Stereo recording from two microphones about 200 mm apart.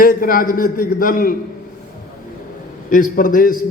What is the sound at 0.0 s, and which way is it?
A man's voice, 45° left (ahead or behind).